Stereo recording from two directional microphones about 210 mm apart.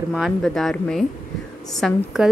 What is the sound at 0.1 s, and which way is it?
A woman's voice, centre (ahead or behind).